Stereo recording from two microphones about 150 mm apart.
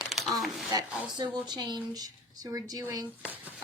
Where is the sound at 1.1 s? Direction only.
30° right (ahead or behind).